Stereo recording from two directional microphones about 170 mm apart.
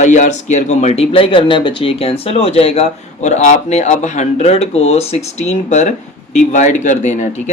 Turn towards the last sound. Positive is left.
turn(degrees=45)  # may be behind; listen again after turning